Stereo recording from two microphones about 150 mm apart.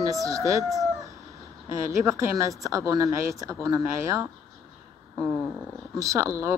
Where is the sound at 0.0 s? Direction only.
20° right (ahead or behind).